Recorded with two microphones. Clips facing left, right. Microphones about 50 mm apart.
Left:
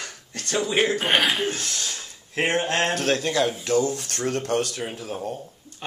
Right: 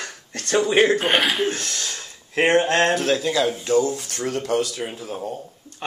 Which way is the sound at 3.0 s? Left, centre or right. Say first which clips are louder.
Right 2 dB; left.